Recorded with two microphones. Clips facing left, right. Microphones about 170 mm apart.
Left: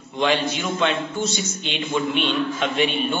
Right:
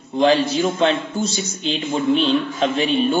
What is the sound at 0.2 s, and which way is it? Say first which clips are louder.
A woman's voice: right 6 dB; 35° right (ahead or behind).